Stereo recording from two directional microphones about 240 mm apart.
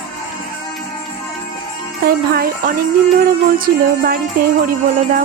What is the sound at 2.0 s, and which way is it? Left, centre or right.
Speech, right.